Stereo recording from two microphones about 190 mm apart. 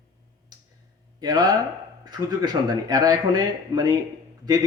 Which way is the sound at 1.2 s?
20° right (ahead or behind).